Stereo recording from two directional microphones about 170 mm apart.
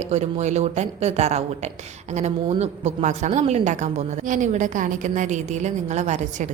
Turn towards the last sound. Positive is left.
turn(degrees=-45)  # may be behind; listen again after turning